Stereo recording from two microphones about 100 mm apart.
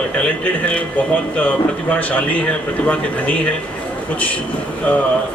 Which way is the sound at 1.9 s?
15° left (ahead or behind).